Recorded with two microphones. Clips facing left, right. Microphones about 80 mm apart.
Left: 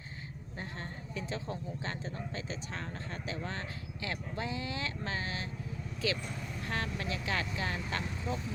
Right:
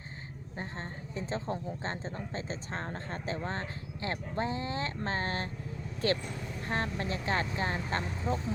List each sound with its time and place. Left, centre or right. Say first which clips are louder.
0.6 s speech: right 2 dB; right
6.7 s speech: right 3 dB; right